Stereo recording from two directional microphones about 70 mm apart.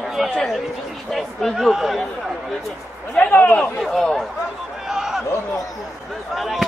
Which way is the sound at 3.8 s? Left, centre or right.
Centre.